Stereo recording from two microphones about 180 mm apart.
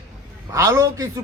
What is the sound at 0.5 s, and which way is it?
Speech, 15° right (ahead or behind).